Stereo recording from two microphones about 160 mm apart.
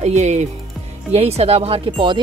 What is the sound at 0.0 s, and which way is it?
Speech, 45° right (ahead or behind).